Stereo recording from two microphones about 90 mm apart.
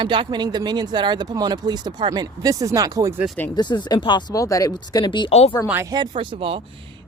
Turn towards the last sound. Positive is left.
turn(degrees=-90)